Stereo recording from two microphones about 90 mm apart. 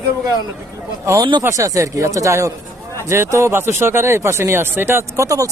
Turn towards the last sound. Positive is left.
turn(degrees=-40)  # may be behind; listen again after turning